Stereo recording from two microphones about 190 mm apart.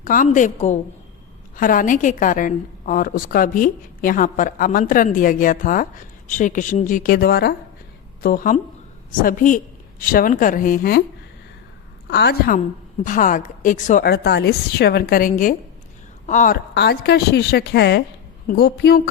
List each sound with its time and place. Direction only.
0.0 s a woman's voice: 45° left (ahead or behind)
12.0 s a woman's voice: 60° left (ahead or behind)
13.1 s a woman's voice: 45° left (ahead or behind)
16.7 s a woman's voice: 60° left (ahead or behind)